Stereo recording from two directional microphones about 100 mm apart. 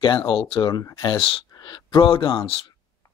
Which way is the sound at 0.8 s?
35° left (ahead or behind).